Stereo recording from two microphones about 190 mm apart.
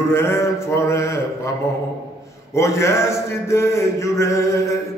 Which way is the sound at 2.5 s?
15° left (ahead or behind).